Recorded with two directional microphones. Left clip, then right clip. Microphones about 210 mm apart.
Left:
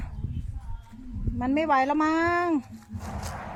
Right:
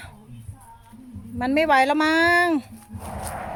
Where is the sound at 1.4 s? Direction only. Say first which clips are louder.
Right 5 dB; centre (ahead or behind).